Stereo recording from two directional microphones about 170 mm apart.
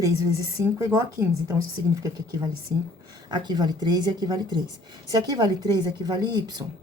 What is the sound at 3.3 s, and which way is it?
A woman's voice, 25° right (ahead or behind).